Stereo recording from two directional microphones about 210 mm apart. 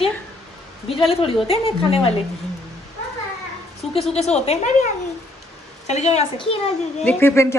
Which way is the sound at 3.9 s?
30° left (ahead or behind).